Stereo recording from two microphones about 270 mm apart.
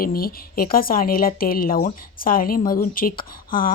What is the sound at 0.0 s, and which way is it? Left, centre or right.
A woman's voice, left.